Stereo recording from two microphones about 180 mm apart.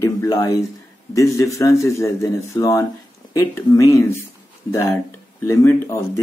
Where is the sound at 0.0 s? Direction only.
20° left (ahead or behind).